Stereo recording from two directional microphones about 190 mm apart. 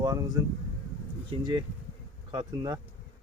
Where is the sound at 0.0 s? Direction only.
20° right (ahead or behind).